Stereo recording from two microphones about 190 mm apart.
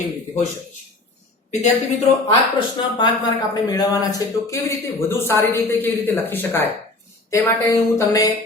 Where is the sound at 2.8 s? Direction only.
25° left (ahead or behind).